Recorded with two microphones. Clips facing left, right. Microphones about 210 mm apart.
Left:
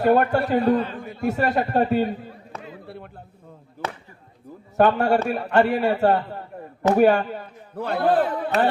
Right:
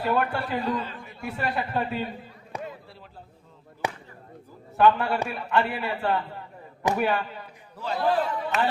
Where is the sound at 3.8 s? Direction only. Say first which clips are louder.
Even; 15° right (ahead or behind).